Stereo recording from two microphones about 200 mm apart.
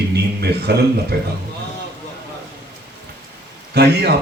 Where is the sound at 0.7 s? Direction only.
55° right (ahead or behind).